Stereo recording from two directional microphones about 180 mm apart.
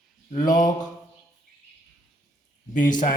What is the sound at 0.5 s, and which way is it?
Mantra, 20° left (ahead or behind).